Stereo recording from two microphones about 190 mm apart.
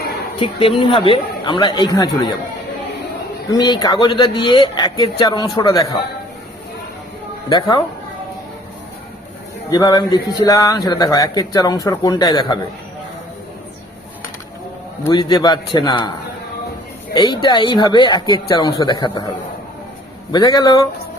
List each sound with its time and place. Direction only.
0.3 s speech: 30° left (ahead or behind)
3.5 s speech: 20° left (ahead or behind)
9.6 s speech: 20° left (ahead or behind)
15.1 s speech: 20° left (ahead or behind)
17.2 s speech: 25° left (ahead or behind)
20.3 s speech: 20° left (ahead or behind)